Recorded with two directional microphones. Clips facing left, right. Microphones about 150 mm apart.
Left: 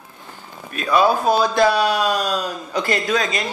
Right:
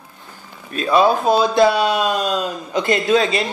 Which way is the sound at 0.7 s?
30° right (ahead or behind).